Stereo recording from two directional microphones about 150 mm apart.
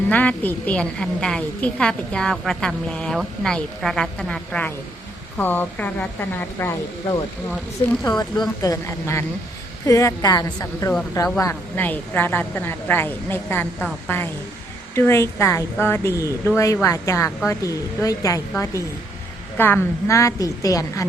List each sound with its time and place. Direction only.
0.1 s a woman's voice: 10° left (ahead or behind)